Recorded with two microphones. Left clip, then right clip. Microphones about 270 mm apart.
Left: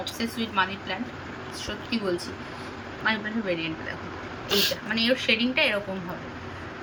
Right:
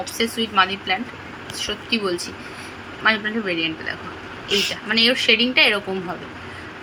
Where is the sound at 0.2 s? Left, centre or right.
Centre.